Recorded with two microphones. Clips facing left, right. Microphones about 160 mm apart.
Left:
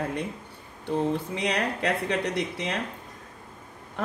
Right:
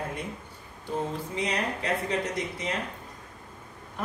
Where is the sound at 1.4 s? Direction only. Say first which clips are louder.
Left 3 dB; 70° left (ahead or behind).